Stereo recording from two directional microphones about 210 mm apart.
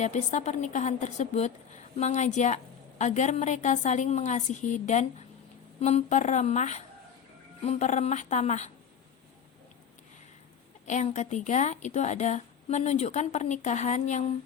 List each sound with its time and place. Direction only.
0.0 s a woman's voice: 35° left (ahead or behind)
10.8 s a woman's voice: 35° left (ahead or behind)